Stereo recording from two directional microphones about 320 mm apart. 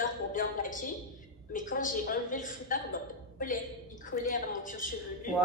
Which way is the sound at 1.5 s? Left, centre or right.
Left.